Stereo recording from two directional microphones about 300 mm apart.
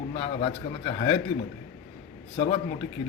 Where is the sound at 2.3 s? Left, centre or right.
Centre.